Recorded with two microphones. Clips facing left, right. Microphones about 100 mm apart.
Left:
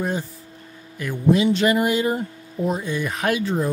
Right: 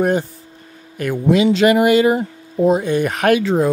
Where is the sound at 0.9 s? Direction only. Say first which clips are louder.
Right 4 dB; 70° right (ahead or behind); by 2.2 s 85° right.